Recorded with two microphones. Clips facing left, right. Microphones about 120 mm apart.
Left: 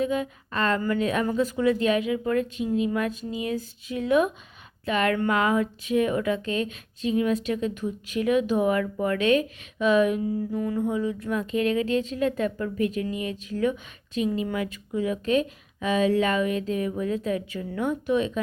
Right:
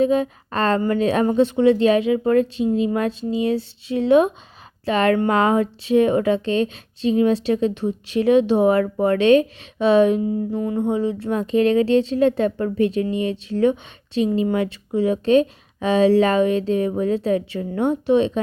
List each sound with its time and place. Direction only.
0.0 s speech: 30° right (ahead or behind)